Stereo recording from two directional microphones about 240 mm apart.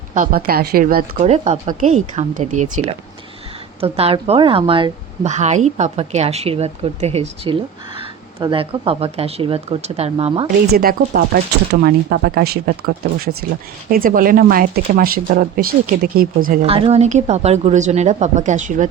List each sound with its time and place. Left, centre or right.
0.1 s a woman's voice: right
10.7 s speech: right
16.6 s a woman's voice: right